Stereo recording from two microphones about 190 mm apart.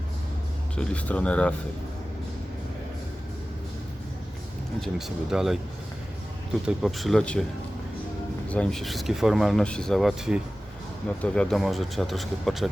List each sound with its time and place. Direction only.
0.8 s speech: 5° left (ahead or behind)
4.8 s speech: centre (ahead or behind)
6.7 s speech: centre (ahead or behind)
8.4 s speech: 5° left (ahead or behind)